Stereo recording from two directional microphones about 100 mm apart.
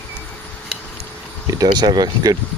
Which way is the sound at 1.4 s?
40° right (ahead or behind).